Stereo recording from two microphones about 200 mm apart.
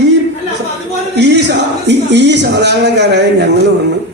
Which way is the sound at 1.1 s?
60° right (ahead or behind).